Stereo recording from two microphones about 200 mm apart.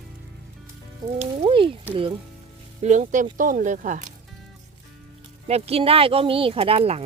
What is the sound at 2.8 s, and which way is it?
Speech, 35° right (ahead or behind).